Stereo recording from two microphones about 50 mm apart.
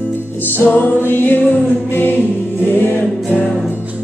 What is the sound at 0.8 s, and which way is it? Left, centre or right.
Music, left.